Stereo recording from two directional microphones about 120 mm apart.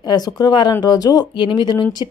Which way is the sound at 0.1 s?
35° left (ahead or behind).